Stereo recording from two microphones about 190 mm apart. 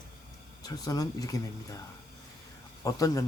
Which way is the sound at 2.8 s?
20° left (ahead or behind).